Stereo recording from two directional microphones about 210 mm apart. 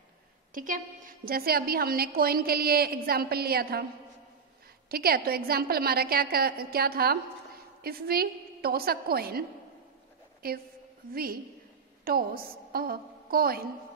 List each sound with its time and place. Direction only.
0.6 s a woman's voice: 40° right (ahead or behind)
4.8 s a woman's voice: 45° right (ahead or behind)
12.0 s a woman's voice: 45° right (ahead or behind)